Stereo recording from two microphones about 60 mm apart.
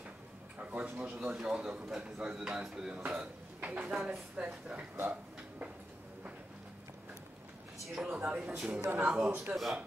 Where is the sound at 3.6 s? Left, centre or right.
Right.